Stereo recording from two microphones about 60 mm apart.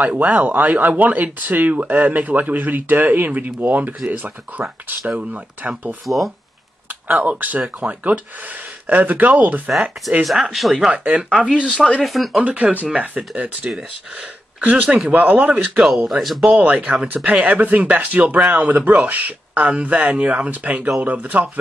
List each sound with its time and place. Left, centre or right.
0.1 s speech: right
5.1 s speech: centre
6.0 s speech: centre
6.9 s speech: right
9.7 s speech: centre
10.9 s speech: centre
12.0 s speech: centre
12.4 s speech: right
16.1 s speech: centre
16.4 s speech: right